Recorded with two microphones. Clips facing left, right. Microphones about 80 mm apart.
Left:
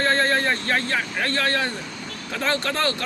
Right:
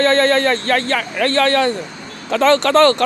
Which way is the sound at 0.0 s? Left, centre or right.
Right.